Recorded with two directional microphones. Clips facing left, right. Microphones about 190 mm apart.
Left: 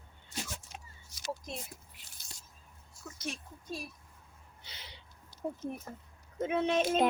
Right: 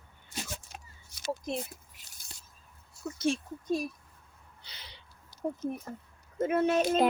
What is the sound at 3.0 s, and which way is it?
Speech, 30° right (ahead or behind).